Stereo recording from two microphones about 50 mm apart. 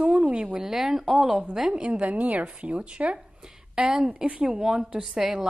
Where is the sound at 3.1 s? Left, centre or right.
Centre.